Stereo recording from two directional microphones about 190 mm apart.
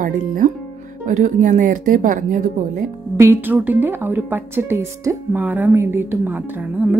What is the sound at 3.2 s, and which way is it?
Speech, 10° right (ahead or behind).